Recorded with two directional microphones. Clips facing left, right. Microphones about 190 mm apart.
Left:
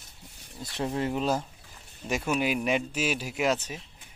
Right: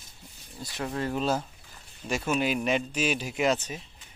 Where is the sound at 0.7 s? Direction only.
25° left (ahead or behind).